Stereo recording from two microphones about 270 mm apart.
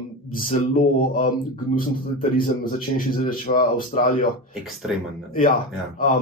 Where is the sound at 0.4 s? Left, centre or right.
Left.